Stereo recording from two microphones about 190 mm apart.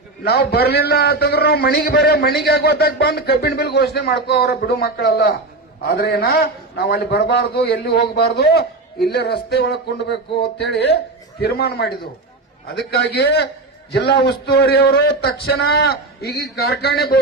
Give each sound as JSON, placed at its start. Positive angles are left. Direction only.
{"t": 0.3, "sound": "a man's voice", "side_deg": 60}